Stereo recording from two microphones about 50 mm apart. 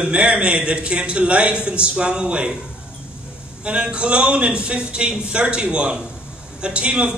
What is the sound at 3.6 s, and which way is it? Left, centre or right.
A man's voice, centre.